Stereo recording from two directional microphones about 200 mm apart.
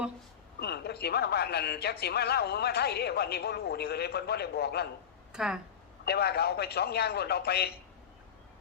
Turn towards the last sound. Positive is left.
turn(degrees=50)  # may be behind; listen again after turning